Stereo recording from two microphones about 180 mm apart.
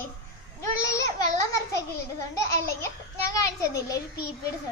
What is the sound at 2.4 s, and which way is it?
A child's voice, 15° left (ahead or behind).